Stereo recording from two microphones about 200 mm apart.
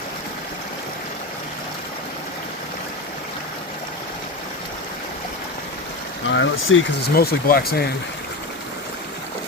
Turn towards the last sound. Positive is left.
turn(degrees=50)  # may be behind; listen again after turning